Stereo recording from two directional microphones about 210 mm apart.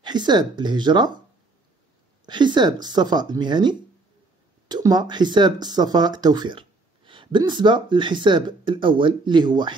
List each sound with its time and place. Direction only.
0.0 s speech: 20° right (ahead or behind)
2.2 s speech: 20° right (ahead or behind)